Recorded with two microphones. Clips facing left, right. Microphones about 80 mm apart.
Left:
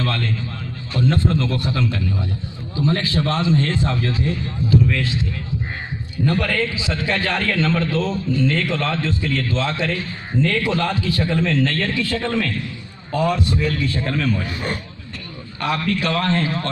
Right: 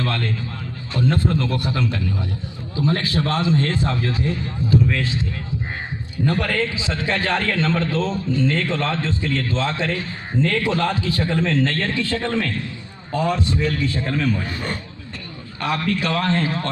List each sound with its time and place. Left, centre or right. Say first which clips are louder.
0.0 s a man's voice: left 1 dB; centre
6.2 s a man's voice: left 1 dB; centre
14.0 s a man's voice: even; centre
14.4 s a man's voice: left 1 dB; centre
15.6 s a man's voice: left 1 dB; centre